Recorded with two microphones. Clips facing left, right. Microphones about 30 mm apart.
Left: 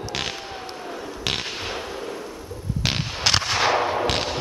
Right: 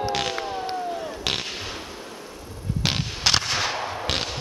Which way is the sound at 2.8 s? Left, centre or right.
Centre.